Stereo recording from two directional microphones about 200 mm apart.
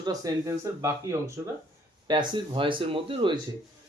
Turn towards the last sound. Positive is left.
turn(degrees=-25)  # may be behind; listen again after turning